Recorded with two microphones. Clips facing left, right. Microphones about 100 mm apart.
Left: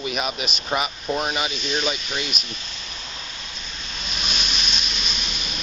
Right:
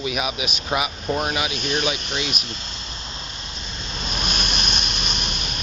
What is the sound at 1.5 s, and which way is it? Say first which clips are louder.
Speech: right 2 dB; 55° right (ahead or behind).